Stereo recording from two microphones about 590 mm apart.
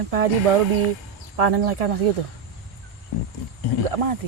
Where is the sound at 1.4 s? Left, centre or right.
Right.